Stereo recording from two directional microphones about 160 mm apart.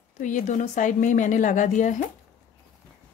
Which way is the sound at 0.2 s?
50° left (ahead or behind).